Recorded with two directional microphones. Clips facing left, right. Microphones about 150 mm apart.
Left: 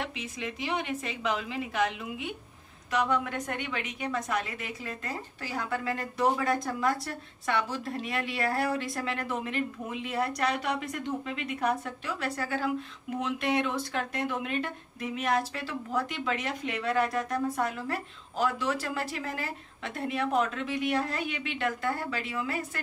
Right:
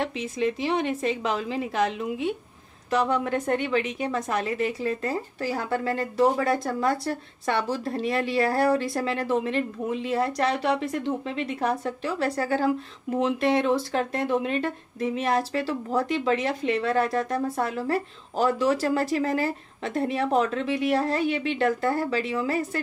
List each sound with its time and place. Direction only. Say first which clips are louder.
0.0 s a woman's voice: right 9 dB; 35° right (ahead or behind)